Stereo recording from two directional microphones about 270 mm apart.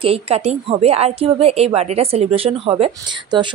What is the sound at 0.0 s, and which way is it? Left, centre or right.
A woman's voice, right.